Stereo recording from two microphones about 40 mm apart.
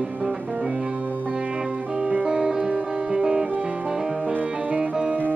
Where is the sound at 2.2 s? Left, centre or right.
Centre.